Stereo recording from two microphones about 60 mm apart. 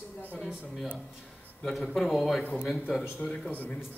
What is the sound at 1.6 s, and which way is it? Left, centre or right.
Speech, centre.